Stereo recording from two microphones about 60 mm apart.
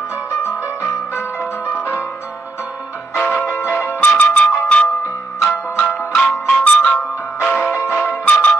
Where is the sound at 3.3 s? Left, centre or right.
Left.